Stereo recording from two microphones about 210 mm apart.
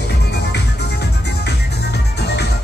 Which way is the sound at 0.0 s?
55° left (ahead or behind).